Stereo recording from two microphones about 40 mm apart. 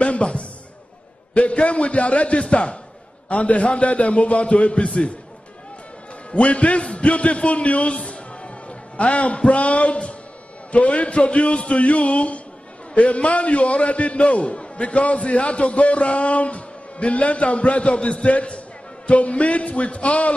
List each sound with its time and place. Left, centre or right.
0.0 s a sound: left
1.3 s a man's voice: left
6.3 s a man's voice: left